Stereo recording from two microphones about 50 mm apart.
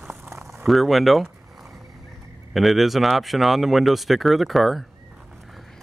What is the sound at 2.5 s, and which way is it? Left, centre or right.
Speech, centre.